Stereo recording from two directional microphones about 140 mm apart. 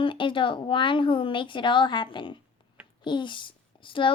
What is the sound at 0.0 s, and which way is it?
A woman's voice, 35° left (ahead or behind).